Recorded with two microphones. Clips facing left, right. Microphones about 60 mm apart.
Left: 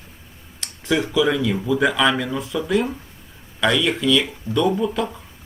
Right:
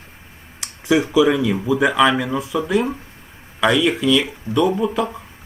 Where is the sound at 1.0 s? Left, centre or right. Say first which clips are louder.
Right 3 dB; centre.